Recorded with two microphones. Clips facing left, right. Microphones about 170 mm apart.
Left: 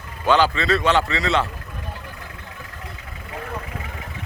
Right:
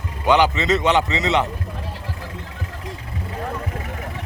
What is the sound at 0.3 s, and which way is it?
A man's voice, 20° right (ahead or behind).